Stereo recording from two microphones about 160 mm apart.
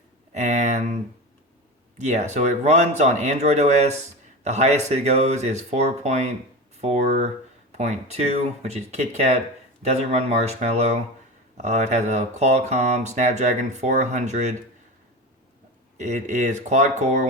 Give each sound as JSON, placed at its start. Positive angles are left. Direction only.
{"t": 0.3, "sound": "a sound", "side_deg": -45}
{"t": 2.0, "sound": "speech", "side_deg": -45}
{"t": 16.0, "sound": "speech", "side_deg": -50}